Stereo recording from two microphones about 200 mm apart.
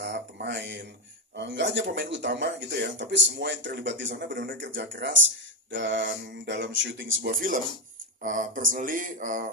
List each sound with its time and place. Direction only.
0.0 s a sound: 60° right (ahead or behind)
1.4 s speech: 65° right (ahead or behind)
4.4 s speech: 45° right (ahead or behind)
4.7 s speech: 60° right (ahead or behind); by 9.5 s 40° right (ahead or behind)